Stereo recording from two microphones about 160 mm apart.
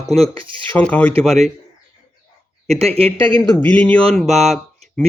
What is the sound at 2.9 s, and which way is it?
Speech, 40° right (ahead or behind).